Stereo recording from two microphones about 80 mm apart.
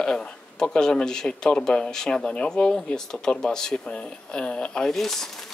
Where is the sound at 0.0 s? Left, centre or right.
Centre.